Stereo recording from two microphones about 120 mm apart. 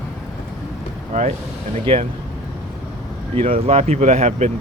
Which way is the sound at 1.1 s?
80° right.